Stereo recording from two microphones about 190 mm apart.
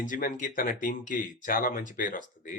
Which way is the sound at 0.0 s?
45° left (ahead or behind).